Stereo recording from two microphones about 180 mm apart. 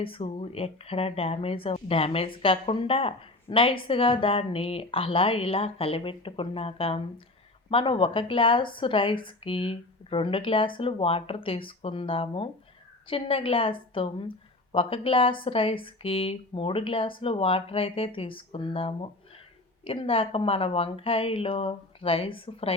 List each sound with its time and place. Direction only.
0.0 s a woman's voice: 30° left (ahead or behind)